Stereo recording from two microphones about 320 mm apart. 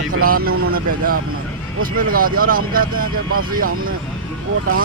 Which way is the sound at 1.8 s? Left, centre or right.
Right.